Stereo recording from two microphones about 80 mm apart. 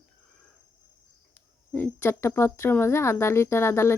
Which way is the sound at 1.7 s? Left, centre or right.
Left.